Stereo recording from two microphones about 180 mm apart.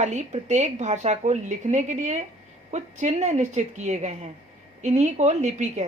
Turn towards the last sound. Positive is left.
turn(degrees=-40)  # may be behind; listen again after turning